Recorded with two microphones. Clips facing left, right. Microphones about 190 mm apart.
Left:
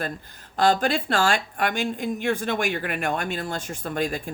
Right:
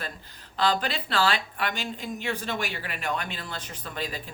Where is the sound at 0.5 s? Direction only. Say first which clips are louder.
Left 6 dB; 45° left (ahead or behind).